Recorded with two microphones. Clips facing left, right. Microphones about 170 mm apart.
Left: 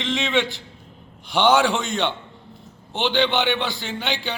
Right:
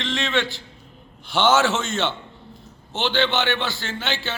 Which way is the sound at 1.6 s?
15° left (ahead or behind).